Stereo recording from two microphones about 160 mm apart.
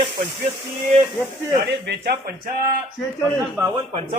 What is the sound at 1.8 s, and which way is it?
Speech, 90° right.